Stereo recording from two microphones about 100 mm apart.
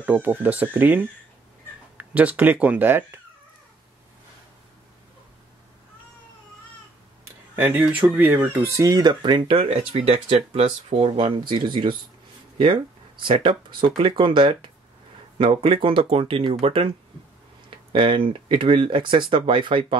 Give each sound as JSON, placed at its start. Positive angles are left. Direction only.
{"t": 0.0, "sound": "speech", "side_deg": -15}
{"t": 7.5, "sound": "speech", "side_deg": -20}
{"t": 8.7, "sound": "speech", "side_deg": -40}
{"t": 11.1, "sound": "speech", "side_deg": -55}